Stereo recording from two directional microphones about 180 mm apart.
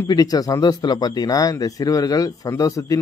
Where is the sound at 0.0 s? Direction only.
20° left (ahead or behind).